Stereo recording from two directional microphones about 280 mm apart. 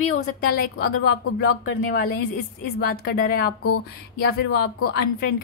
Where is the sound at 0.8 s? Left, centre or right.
Left.